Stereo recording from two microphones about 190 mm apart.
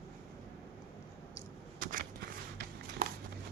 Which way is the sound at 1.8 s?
45° right (ahead or behind).